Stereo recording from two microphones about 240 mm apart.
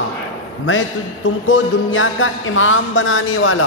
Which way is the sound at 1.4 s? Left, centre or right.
Left.